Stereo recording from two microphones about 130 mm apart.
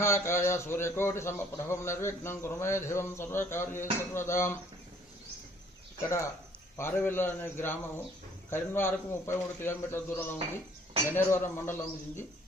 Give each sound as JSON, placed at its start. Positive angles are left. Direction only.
{"t": 0.0, "sound": "speech", "side_deg": 20}
{"t": 6.7, "sound": "a man's voice", "side_deg": 20}